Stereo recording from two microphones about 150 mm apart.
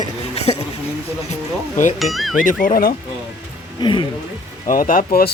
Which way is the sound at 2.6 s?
75° left (ahead or behind).